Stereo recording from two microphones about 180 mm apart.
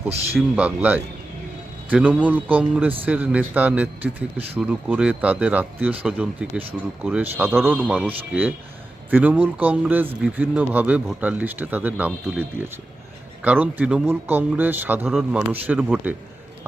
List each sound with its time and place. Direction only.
0.3 s speech: 10° right (ahead or behind)